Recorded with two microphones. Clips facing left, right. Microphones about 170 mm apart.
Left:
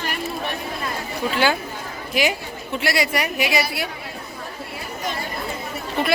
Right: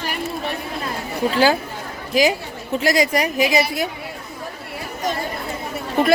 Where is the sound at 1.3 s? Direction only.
35° right (ahead or behind).